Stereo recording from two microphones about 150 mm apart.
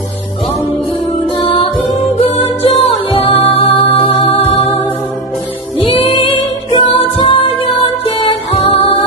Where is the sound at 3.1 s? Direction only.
40° left (ahead or behind).